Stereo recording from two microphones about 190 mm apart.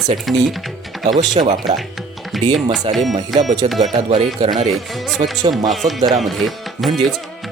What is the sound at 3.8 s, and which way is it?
Speech, 35° right (ahead or behind).